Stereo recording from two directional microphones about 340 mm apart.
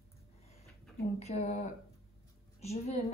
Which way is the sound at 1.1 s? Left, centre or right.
Centre.